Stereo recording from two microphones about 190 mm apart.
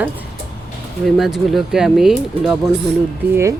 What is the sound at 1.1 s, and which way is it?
Speech, centre (ahead or behind).